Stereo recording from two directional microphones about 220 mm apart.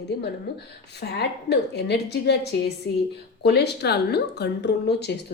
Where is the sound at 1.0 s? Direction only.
50° left (ahead or behind).